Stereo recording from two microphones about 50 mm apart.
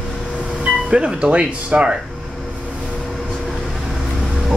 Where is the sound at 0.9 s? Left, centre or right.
Right.